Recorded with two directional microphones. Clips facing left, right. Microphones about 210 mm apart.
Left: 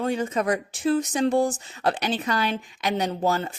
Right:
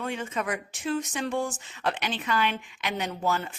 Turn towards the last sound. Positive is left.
turn(degrees=35)  # may be behind; listen again after turning